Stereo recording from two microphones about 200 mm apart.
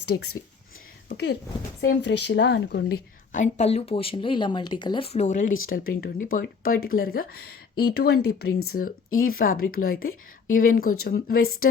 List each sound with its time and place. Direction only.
1.0 s speech: 55° left (ahead or behind)
3.3 s speech: 35° left (ahead or behind)